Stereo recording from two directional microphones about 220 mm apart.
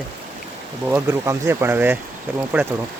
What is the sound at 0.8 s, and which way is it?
Speech, 10° right (ahead or behind).